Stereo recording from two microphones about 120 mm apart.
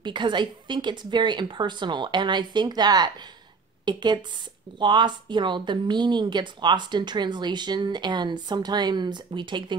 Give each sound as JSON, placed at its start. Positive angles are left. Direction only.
{"t": 0.0, "sound": "speech", "side_deg": -40}